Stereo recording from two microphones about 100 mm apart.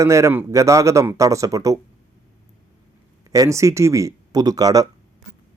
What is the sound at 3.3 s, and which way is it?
Speech, 30° right (ahead or behind).